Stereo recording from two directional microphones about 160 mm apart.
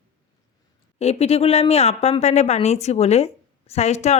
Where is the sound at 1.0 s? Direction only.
40° left (ahead or behind).